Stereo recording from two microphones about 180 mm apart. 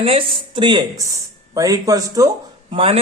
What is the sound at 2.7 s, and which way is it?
Speech, 35° right (ahead or behind).